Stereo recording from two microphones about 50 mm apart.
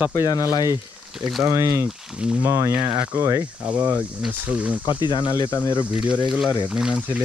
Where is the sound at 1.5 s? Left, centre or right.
Right.